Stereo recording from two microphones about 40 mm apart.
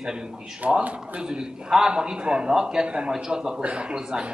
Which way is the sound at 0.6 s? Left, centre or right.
Right.